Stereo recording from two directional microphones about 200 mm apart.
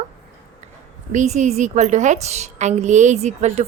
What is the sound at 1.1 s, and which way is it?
A woman's voice, 35° right (ahead or behind).